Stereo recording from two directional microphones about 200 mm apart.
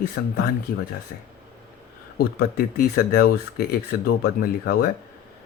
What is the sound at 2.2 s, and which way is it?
Speech, 50° left (ahead or behind).